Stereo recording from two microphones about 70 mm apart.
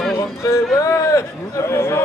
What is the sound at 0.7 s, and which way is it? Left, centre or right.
Speech, left.